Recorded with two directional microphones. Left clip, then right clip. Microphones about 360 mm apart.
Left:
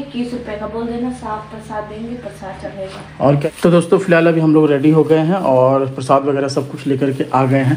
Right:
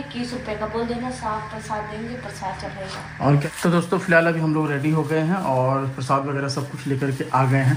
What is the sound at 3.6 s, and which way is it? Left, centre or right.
A man's voice, left.